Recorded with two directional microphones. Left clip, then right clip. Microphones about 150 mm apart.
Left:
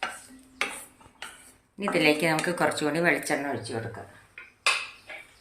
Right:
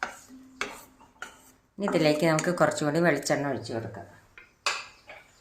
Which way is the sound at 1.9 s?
65° right (ahead or behind).